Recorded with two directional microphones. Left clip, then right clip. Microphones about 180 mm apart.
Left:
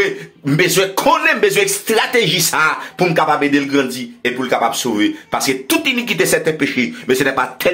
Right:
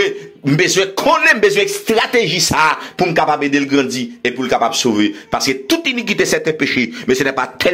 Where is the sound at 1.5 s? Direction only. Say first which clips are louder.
Even; 15° right (ahead or behind).